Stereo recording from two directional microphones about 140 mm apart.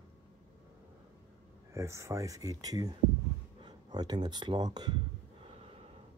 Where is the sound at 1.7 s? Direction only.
20° right (ahead or behind).